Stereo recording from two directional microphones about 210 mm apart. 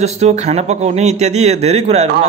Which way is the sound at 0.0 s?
30° right (ahead or behind).